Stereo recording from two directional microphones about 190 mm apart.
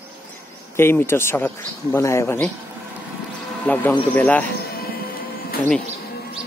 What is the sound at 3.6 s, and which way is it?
Speech, 10° left (ahead or behind).